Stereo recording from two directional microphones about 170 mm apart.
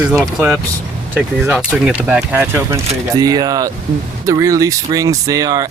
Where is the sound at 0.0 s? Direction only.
5° right (ahead or behind).